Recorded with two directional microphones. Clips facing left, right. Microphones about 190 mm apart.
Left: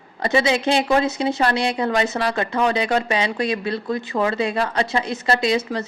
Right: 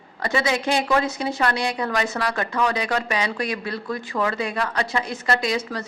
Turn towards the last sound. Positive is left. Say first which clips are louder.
# left 4 dB
turn(degrees=25)  # may be behind; listen again after turning